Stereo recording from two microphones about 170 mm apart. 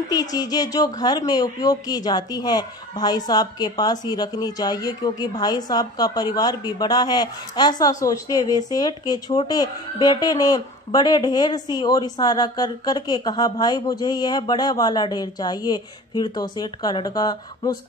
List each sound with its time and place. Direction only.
0.1 s speech: 20° left (ahead or behind)